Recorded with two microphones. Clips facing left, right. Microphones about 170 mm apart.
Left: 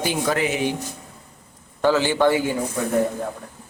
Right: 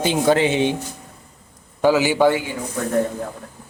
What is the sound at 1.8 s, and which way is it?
Speech, 10° right (ahead or behind).